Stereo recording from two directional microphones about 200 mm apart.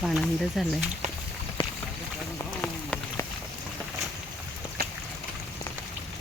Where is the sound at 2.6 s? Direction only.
10° left (ahead or behind).